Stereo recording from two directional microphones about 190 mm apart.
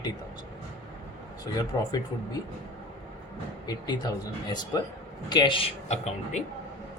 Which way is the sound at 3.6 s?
20° left (ahead or behind).